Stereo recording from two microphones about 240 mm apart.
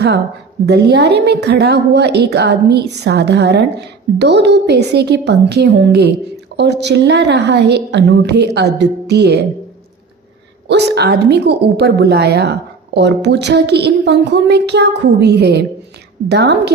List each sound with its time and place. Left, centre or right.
0.6 s a woman's voice: right
10.7 s a woman's voice: right